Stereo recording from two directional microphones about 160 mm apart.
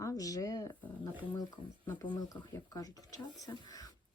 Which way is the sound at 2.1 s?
25° left (ahead or behind).